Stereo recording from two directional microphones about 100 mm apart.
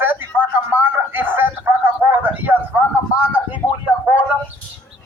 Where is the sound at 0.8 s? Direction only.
20° right (ahead or behind).